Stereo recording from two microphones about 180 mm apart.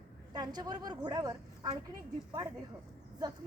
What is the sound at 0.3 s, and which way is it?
A woman's voice, 20° right (ahead or behind).